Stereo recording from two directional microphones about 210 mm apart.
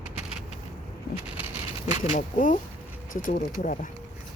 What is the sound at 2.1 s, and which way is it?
Speech, 40° left (ahead or behind).